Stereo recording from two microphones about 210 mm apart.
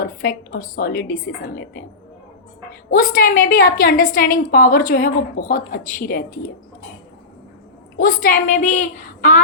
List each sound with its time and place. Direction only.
0.0 s a woman's voice: 45° left (ahead or behind)
2.9 s a woman's voice: 40° left (ahead or behind)
7.9 s a woman's voice: 45° left (ahead or behind)